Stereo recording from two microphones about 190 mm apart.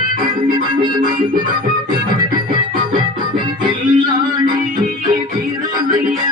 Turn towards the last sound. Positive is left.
turn(degrees=-25)  # may be behind; listen again after turning